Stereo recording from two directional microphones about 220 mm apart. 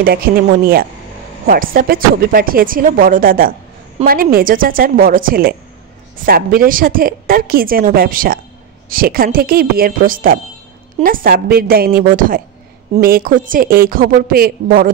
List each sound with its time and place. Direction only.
0.0 s a woman's voice: 45° right (ahead or behind)